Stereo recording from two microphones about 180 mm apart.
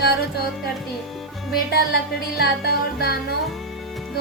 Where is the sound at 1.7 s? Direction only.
60° left (ahead or behind).